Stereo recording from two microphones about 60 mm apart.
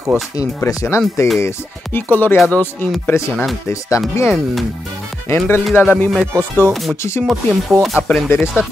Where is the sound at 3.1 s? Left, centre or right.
Left.